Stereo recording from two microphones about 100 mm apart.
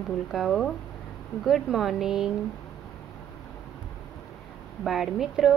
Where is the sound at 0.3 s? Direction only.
Centre (ahead or behind).